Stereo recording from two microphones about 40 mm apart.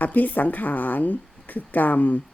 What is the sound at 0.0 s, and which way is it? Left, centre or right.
A woman's voice, left.